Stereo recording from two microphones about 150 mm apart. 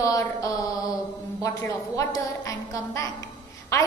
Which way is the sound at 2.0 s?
25° left (ahead or behind).